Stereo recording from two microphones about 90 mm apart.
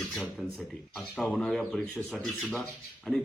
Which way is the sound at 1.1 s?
15° left (ahead or behind).